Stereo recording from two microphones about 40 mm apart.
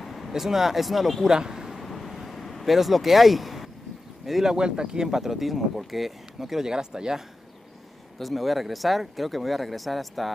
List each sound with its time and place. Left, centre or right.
0.0 s vehicle: centre
0.3 s speech: centre
1.3 s speech: centre
1.7 s vehicle: centre
4.5 s speech: right
8.2 s speech: centre